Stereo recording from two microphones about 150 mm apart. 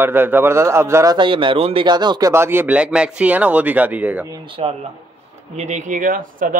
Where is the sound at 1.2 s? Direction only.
35° right (ahead or behind).